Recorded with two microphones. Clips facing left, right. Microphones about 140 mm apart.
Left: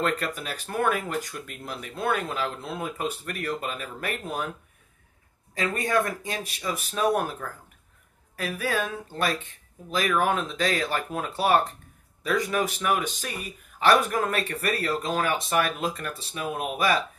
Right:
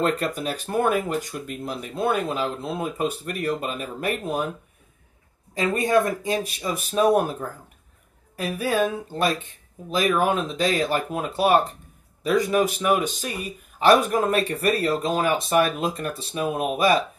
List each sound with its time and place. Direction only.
0.0 s speech: 25° right (ahead or behind)
5.5 s speech: 20° right (ahead or behind)